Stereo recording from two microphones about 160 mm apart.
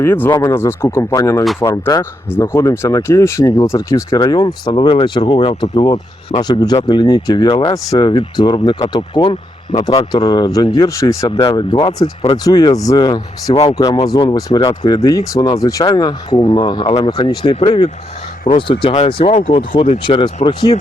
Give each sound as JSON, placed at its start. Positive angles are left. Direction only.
{"t": 0.0, "sound": "speech", "side_deg": 15}
{"t": 11.3, "sound": "speech", "side_deg": 30}
{"t": 12.5, "sound": "speech", "side_deg": 25}